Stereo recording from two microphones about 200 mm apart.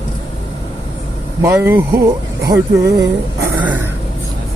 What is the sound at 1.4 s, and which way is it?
Music, 15° right (ahead or behind).